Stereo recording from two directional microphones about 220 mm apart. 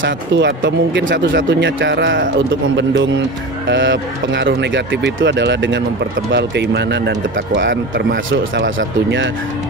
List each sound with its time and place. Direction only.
0.0 s speech: 50° right (ahead or behind)
3.6 s a man's voice: 55° right (ahead or behind)